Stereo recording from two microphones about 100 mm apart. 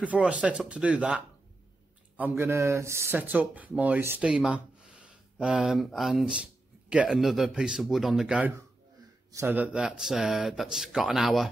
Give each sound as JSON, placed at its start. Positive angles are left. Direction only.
{"t": 0.0, "sound": "speech", "side_deg": -10}
{"t": 2.3, "sound": "speech", "side_deg": -30}
{"t": 4.2, "sound": "a sound", "side_deg": -10}
{"t": 5.8, "sound": "speech", "side_deg": 0}
{"t": 9.5, "sound": "speech", "side_deg": -15}